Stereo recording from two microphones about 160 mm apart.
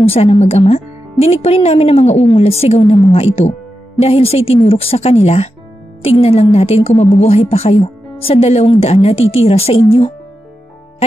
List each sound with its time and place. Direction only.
0.0 s a woman's voice: 35° left (ahead or behind)